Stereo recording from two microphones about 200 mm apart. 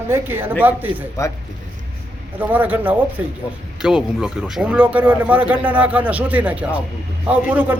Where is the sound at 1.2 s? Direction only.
15° left (ahead or behind).